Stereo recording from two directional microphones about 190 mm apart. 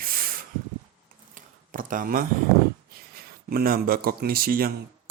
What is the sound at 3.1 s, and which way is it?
Speech, 50° right (ahead or behind).